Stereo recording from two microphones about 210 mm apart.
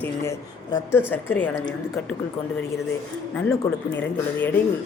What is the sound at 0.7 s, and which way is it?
Speech, 15° left (ahead or behind).